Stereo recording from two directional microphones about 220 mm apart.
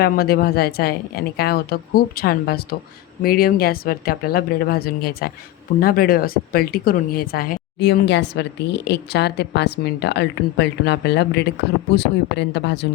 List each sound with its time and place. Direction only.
0.0 s speech: 45° left (ahead or behind)